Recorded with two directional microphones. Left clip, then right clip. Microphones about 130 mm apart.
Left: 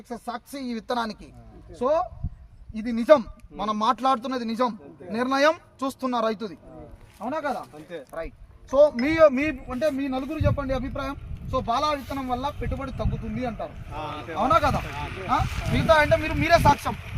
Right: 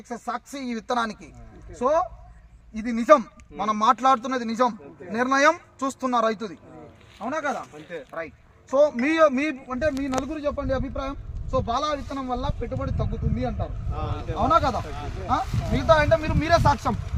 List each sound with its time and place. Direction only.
0.1 s a man's voice: 15° left (ahead or behind); by 15.0 s 5° right (ahead or behind)
15.4 s speech: 10° left (ahead or behind)